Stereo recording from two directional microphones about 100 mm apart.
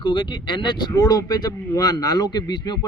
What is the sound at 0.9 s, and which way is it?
Speech, 35° left (ahead or behind).